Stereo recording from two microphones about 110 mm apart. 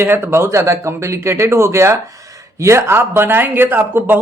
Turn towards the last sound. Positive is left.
turn(degrees=-20)  # may be behind; listen again after turning